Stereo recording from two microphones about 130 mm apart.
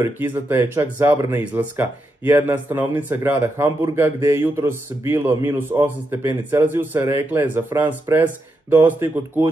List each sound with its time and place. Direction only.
0.0 s speech: 15° right (ahead or behind)